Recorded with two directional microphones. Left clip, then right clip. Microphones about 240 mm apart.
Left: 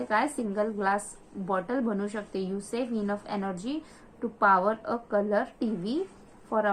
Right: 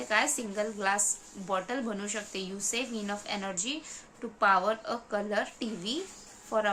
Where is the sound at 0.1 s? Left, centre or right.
Right.